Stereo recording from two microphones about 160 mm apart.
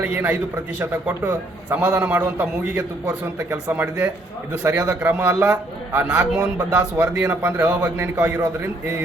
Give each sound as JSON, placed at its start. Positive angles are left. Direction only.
{"t": 0.0, "sound": "a man's voice", "side_deg": -10}